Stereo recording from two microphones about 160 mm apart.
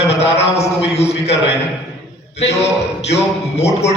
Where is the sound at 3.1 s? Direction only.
40° left (ahead or behind).